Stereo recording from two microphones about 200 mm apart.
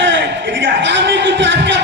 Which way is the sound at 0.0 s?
65° right (ahead or behind).